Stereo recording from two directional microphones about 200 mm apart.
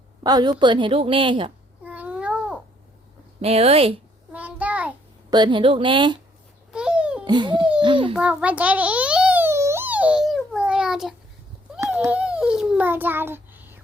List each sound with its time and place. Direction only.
0.2 s a woman's voice: 20° right (ahead or behind)
1.8 s babbling: 5° right (ahead or behind)
3.4 s speech: 30° right (ahead or behind)
4.3 s child singing: 10° right (ahead or behind)
5.3 s a woman's voice: 20° right (ahead or behind)
6.7 s babbling: 5° right (ahead or behind)
7.3 s a woman's voice: 20° right (ahead or behind)
8.1 s a sound: 5° right (ahead or behind)